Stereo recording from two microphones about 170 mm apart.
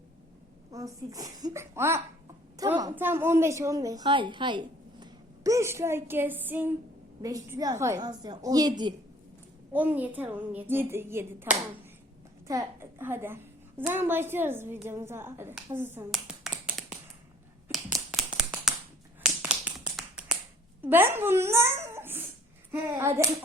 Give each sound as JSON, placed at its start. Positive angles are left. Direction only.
{"t": 0.7, "sound": "a woman's voice", "side_deg": -20}
{"t": 9.7, "sound": "a woman's voice", "side_deg": -10}
{"t": 17.7, "sound": "a sound", "side_deg": -5}
{"t": 19.2, "sound": "finger snapping", "side_deg": -5}
{"t": 20.8, "sound": "a woman's voice", "side_deg": -10}